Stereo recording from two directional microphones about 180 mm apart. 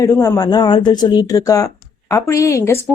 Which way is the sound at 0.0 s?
20° left (ahead or behind).